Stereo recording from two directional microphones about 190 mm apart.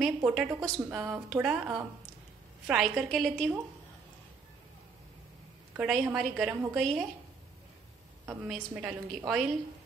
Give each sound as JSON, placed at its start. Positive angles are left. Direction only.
{"t": 0.0, "sound": "a woman's voice", "side_deg": -5}
{"t": 5.8, "sound": "a woman's voice", "side_deg": -5}
{"t": 8.3, "sound": "a woman's voice", "side_deg": -10}